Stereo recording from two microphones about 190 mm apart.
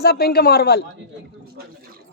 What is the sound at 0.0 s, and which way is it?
Speech, 55° left (ahead or behind).